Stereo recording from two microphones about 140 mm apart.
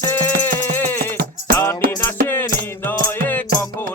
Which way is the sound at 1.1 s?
90° right.